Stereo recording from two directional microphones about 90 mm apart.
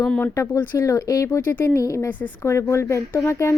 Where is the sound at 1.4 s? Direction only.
20° left (ahead or behind).